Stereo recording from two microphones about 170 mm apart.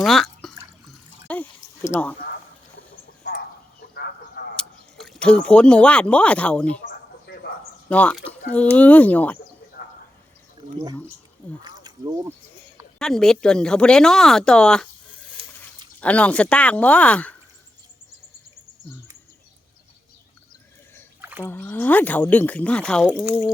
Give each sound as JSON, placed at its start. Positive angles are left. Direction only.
{"t": 0.0, "sound": "drip", "side_deg": 0}
{"t": 1.3, "sound": "a sound", "side_deg": 15}
{"t": 3.2, "sound": "a sound", "side_deg": 65}
{"t": 4.5, "sound": "speech", "side_deg": 5}
{"t": 7.9, "sound": "speech", "side_deg": 10}
{"t": 11.6, "sound": "speech", "side_deg": -25}
{"t": 13.0, "sound": "speech", "side_deg": 5}
{"t": 16.0, "sound": "speech", "side_deg": 10}
{"t": 21.2, "sound": "a sound", "side_deg": -10}
{"t": 21.5, "sound": "speech", "side_deg": 10}
{"t": 23.0, "sound": "speech", "side_deg": -5}